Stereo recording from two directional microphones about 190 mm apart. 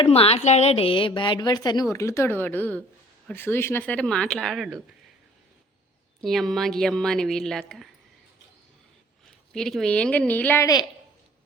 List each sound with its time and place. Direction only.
0.0 s a woman's voice: 30° left (ahead or behind); by 4.8 s centre (ahead or behind)
6.2 s a woman's voice: centre (ahead or behind)
9.5 s a woman's voice: centre (ahead or behind); by 10.8 s 15° left (ahead or behind)